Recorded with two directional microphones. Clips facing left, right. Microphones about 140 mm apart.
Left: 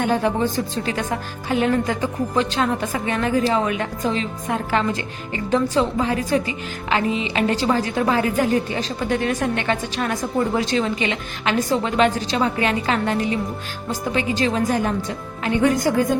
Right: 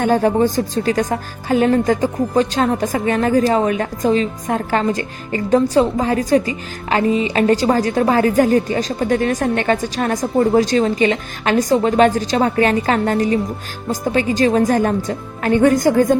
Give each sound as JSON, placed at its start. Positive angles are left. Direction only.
{"t": 0.0, "sound": "a woman's voice", "side_deg": -45}